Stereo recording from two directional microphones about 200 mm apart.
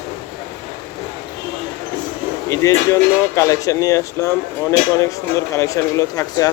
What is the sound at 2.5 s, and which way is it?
Speech, 15° left (ahead or behind).